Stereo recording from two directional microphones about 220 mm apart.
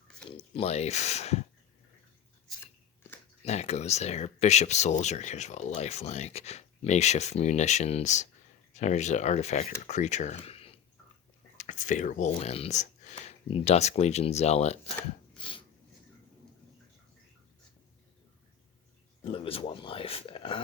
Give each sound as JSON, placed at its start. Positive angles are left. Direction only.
{"t": 0.3, "sound": "speech", "side_deg": 25}
{"t": 3.4, "sound": "speech", "side_deg": 30}
{"t": 15.4, "sound": "a sound", "side_deg": 25}
{"t": 19.2, "sound": "speech", "side_deg": 25}